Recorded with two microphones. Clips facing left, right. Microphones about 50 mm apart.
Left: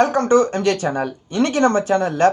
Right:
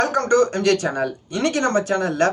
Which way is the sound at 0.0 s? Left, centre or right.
Left.